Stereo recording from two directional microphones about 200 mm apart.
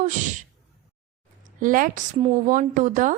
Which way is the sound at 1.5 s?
40° right (ahead or behind).